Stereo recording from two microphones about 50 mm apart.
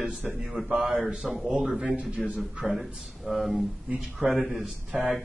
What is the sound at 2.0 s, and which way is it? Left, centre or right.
Speech, right.